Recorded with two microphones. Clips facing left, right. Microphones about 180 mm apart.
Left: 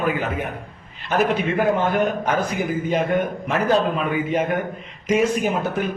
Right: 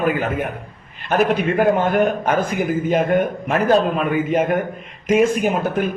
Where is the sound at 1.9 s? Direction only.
50° right (ahead or behind).